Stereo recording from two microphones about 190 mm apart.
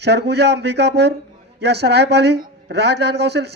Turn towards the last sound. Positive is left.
turn(degrees=-60)  # may be behind; listen again after turning